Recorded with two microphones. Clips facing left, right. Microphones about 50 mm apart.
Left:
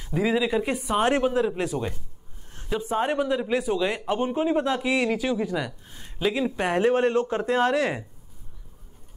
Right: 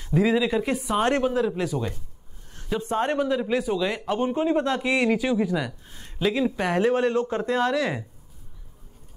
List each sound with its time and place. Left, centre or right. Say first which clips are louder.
0.0 s a man's voice: right 2 dB; centre
1.6 s speech: even; left
2.7 s speech: even; centre; by 4.2 s left
4.2 s a man's voice: right 2 dB; centre
6.6 s speech: left 2 dB; centre
7.2 s a man's voice: left 1 dB; centre
7.5 s speech: left 2 dB; left